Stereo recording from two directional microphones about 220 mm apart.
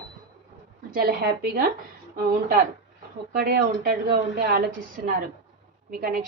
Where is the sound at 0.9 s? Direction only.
45° right (ahead or behind).